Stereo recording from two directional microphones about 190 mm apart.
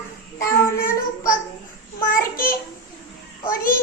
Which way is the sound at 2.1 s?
50° left (ahead or behind).